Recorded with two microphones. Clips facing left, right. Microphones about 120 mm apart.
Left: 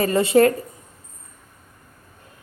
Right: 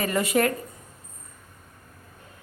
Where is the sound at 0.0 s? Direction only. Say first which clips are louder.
Left 7 dB; 30° left (ahead or behind).